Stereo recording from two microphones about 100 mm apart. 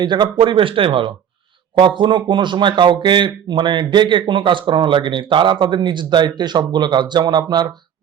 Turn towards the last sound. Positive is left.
turn(degrees=-45)  # may be behind; listen again after turning